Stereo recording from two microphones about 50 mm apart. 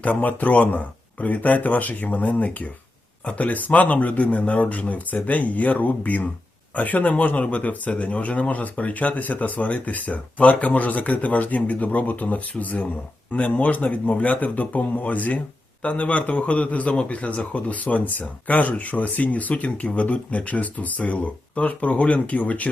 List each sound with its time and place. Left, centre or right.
0.0 s a man's voice: left